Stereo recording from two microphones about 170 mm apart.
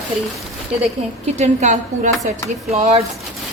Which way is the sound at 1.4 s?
45° right (ahead or behind).